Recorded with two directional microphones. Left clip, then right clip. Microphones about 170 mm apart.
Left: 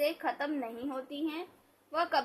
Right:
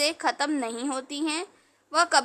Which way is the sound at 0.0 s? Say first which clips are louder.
Right 6 dB; 50° right (ahead or behind).